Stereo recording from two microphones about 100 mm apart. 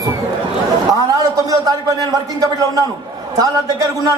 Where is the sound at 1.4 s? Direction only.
35° right (ahead or behind).